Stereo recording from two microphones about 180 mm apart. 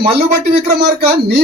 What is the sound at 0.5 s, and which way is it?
Speech, 60° right (ahead or behind).